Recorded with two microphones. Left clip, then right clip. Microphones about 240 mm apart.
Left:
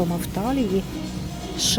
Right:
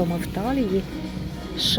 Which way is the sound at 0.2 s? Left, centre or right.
Centre.